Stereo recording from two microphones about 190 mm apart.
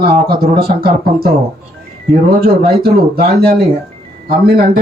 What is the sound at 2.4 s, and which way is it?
Speech, 55° right (ahead or behind).